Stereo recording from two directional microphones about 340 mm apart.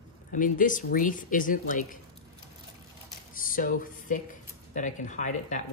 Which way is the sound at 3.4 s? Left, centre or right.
Left.